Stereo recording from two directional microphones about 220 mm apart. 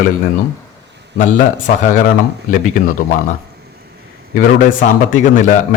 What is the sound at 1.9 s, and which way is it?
Speech, 35° left (ahead or behind).